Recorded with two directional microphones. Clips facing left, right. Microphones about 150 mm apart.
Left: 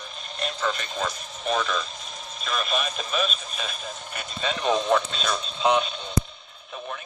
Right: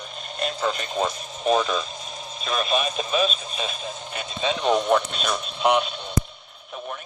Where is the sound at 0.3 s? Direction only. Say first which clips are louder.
Right 3 dB; 35° right (ahead or behind).